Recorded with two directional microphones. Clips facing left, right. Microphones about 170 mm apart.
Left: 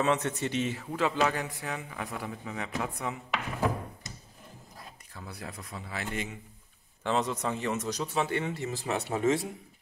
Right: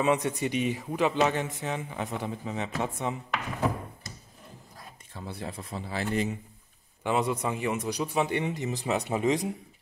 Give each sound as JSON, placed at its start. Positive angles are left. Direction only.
{"t": 0.0, "sound": "speech", "side_deg": -10}
{"t": 4.1, "sound": "a sound", "side_deg": 20}
{"t": 5.1, "sound": "speech", "side_deg": -25}
{"t": 7.0, "sound": "a man's voice", "side_deg": -10}